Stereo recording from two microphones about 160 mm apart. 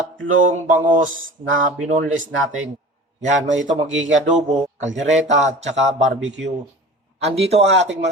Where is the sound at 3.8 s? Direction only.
45° right (ahead or behind).